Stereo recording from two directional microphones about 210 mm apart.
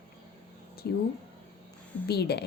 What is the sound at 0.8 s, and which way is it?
Speech, 50° left (ahead or behind).